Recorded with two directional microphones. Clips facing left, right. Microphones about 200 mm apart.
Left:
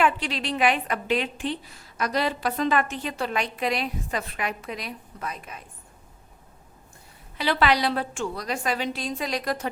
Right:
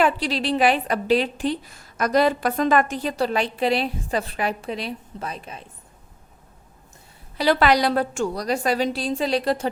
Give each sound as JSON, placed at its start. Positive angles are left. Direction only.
{"t": 0.0, "sound": "a woman's voice", "side_deg": -35}
{"t": 7.3, "sound": "a woman's voice", "side_deg": -40}